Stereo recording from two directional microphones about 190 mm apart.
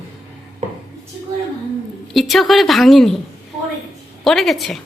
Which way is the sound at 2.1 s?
Centre (ahead or behind).